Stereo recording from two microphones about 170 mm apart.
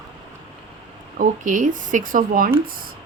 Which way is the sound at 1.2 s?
50° right (ahead or behind).